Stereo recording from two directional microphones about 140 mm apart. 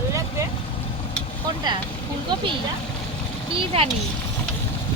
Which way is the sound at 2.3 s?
35° right (ahead or behind).